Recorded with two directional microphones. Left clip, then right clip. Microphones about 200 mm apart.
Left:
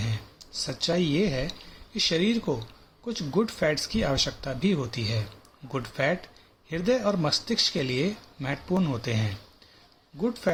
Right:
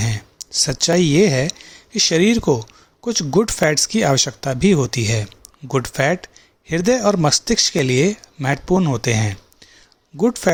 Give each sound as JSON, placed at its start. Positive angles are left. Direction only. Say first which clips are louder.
{"t": 0.0, "sound": "speech", "louder": "right 10 dB", "side_deg": -55}